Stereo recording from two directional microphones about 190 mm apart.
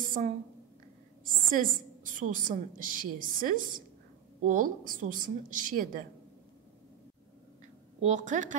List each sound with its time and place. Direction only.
0.0 s a sound: 45° right (ahead or behind)
1.2 s a woman's voice: 45° right (ahead or behind)
8.0 s a woman's voice: 40° right (ahead or behind)